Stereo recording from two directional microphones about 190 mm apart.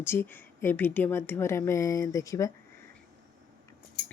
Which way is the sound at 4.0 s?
55° left (ahead or behind).